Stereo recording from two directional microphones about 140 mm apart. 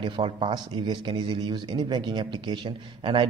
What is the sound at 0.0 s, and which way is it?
A man's voice, 35° right (ahead or behind).